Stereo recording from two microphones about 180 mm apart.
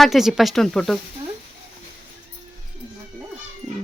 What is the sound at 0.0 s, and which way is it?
Speech, centre (ahead or behind).